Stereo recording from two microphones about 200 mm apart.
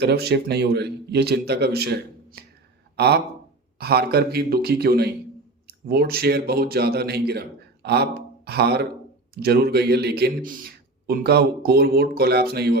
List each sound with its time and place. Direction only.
0.0 s a man's voice: 55° right (ahead or behind)